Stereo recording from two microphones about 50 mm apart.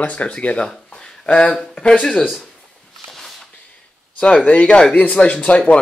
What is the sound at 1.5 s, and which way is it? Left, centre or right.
Speech, centre.